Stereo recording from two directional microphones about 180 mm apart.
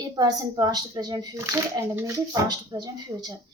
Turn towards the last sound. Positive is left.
turn(degrees=-20)  # may be behind; listen again after turning